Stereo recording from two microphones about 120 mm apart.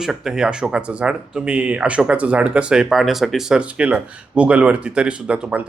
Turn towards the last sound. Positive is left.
turn(degrees=-10)  # may be behind; listen again after turning